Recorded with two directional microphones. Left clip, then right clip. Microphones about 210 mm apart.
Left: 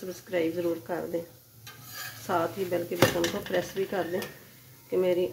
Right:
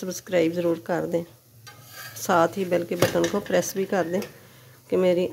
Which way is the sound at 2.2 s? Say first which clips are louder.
Right 8 dB; 60° right (ahead or behind).